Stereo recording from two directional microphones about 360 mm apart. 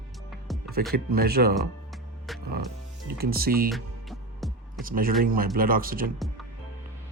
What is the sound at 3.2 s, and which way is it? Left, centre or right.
Speech, right.